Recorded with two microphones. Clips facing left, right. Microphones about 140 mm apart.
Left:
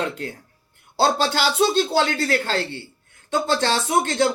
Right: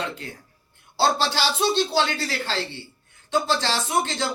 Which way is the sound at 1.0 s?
55° left (ahead or behind).